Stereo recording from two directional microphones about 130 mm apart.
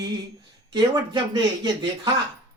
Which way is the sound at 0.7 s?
35° right (ahead or behind).